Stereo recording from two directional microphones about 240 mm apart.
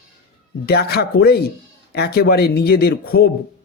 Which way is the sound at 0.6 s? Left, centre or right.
Left.